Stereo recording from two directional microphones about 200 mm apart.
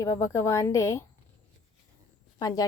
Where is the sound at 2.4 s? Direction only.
20° left (ahead or behind).